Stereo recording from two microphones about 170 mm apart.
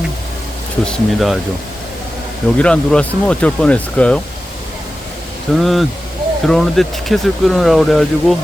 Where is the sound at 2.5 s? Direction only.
5° left (ahead or behind).